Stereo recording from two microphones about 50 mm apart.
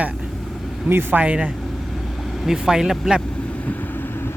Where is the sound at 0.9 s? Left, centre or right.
Right.